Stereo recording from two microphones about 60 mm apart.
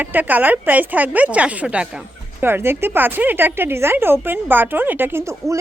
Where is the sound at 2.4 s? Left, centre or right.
Right.